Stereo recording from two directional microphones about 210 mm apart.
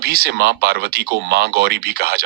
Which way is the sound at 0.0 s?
50° right (ahead or behind).